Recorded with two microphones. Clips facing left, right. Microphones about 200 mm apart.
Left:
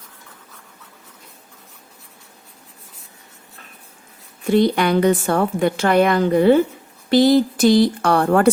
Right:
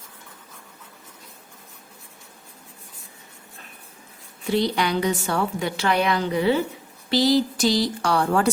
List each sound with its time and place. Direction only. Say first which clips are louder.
4.4 s a woman's voice: left 6 dB; 50° left (ahead or behind)